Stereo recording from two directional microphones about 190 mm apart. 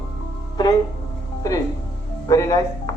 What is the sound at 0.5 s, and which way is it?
Music, 20° left (ahead or behind).